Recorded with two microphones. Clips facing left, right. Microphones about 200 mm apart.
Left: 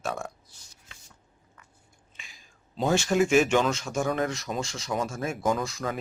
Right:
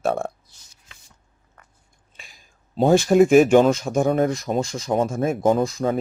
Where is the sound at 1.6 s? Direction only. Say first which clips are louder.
Right 4 dB; 60° right (ahead or behind).